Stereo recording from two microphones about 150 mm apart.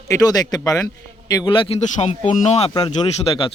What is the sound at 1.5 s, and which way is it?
Speech, 35° left (ahead or behind).